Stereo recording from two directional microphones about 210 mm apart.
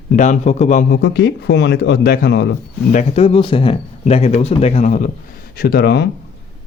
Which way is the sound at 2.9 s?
35° left (ahead or behind).